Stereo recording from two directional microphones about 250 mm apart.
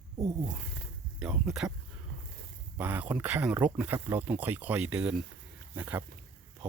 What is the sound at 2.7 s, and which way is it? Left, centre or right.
Speech, centre.